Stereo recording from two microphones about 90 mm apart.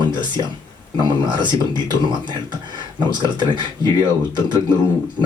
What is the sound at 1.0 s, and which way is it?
Speech, 55° right (ahead or behind).